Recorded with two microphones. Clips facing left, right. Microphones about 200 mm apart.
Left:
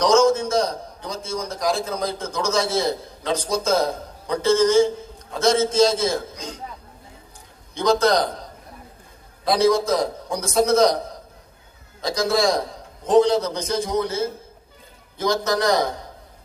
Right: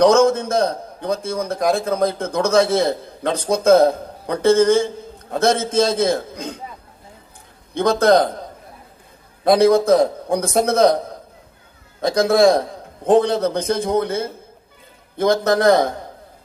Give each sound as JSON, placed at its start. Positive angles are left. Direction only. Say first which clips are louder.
{"t": 0.0, "sound": "a man's voice", "louder": "right 3 dB", "side_deg": -55}
{"t": 7.7, "sound": "a man's voice", "louder": "right 4 dB", "side_deg": -55}
{"t": 9.4, "sound": "a man's voice", "louder": "right 5 dB", "side_deg": -60}
{"t": 12.0, "sound": "a man's voice", "louder": "right 7 dB", "side_deg": -55}